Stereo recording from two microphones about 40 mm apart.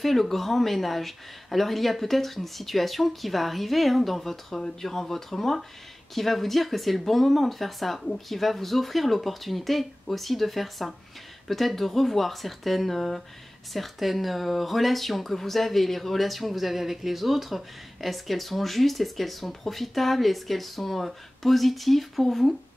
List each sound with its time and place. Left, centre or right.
0.0 s speech: centre